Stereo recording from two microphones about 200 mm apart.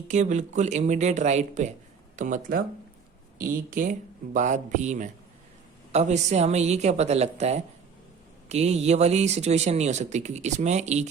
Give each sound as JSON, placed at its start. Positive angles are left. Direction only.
{"t": 0.1, "sound": "speech", "side_deg": -35}
{"t": 3.7, "sound": "speech", "side_deg": -40}